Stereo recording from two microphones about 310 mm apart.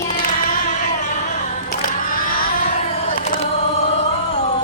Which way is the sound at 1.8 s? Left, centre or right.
Left.